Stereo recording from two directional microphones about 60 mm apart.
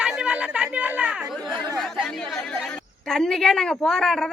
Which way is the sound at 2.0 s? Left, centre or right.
Centre.